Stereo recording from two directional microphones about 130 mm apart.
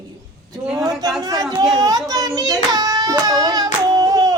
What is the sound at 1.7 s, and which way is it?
Hands, 30° right (ahead or behind).